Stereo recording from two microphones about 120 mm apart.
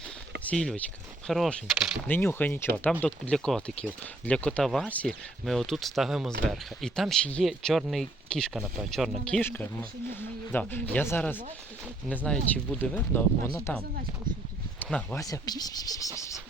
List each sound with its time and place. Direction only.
0.4 s speech: 5° left (ahead or behind)
2.0 s speech: 15° left (ahead or behind)
5.5 s speech: centre (ahead or behind)
9.4 s speech: 15° left (ahead or behind)
14.8 s a sound: 10° left (ahead or behind)
15.1 s speech: 30° left (ahead or behind)